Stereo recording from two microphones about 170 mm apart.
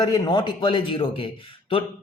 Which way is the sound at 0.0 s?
25° left (ahead or behind).